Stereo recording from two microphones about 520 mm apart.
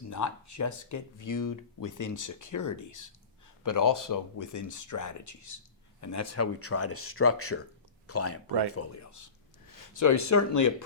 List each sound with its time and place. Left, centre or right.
0.1 s speech: left